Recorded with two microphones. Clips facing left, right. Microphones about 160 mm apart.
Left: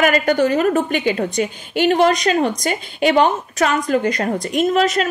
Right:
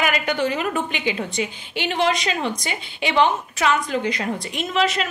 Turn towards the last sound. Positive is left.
turn(degrees=45)  # may be behind; listen again after turning